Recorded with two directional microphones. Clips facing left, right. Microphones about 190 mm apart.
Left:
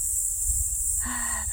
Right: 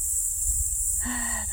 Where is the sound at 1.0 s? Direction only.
20° right (ahead or behind).